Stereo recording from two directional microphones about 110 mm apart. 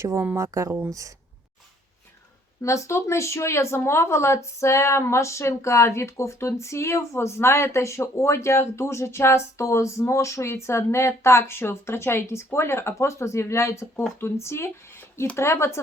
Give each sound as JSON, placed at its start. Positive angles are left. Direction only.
{"t": 0.0, "sound": "speech", "side_deg": -25}
{"t": 2.6, "sound": "speech", "side_deg": 25}